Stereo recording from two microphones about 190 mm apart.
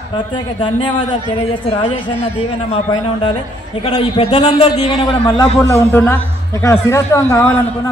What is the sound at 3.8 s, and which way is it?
A man's voice, 25° left (ahead or behind).